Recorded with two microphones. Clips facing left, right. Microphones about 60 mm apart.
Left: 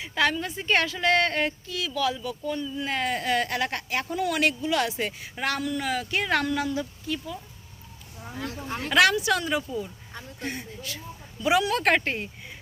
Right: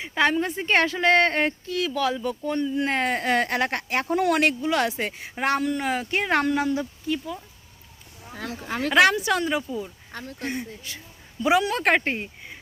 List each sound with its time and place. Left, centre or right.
0.0 s speech: right
8.9 s speech: right
9.5 s speech: centre